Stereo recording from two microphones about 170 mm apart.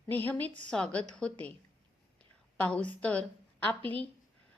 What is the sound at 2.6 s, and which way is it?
A woman's voice, 5° left (ahead or behind).